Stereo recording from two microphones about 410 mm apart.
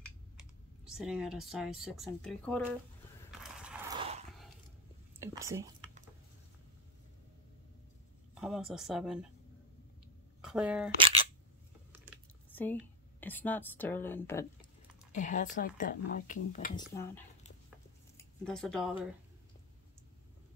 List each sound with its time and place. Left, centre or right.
0.9 s speech: centre
3.3 s a sound: centre
5.2 s whispering: centre
8.4 s speech: centre
10.4 s speech: centre
12.1 s typing: centre
13.2 s speech: centre
15.1 s speech: centre
18.1 s a sound: centre